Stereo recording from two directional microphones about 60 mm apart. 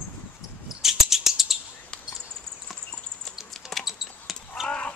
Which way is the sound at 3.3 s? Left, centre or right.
Centre.